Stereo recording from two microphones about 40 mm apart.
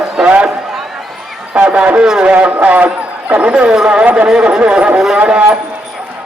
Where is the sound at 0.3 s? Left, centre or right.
Right.